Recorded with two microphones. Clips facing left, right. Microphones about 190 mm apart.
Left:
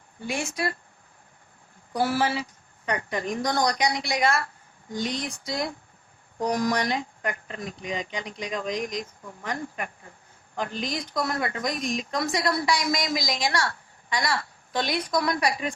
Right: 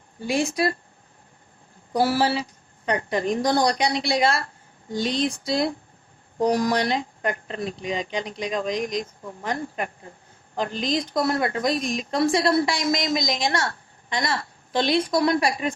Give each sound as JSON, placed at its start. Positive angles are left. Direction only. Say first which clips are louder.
{"t": 0.3, "sound": "a woman's voice", "louder": "right 6 dB", "side_deg": -35}
{"t": 1.9, "sound": "a woman's voice", "louder": "right 4 dB", "side_deg": -35}